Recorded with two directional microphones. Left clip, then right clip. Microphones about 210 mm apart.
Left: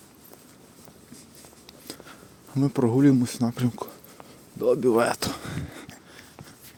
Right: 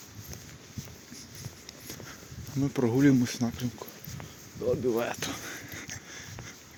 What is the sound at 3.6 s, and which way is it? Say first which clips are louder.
Speech: left 8 dB; 55° left (ahead or behind).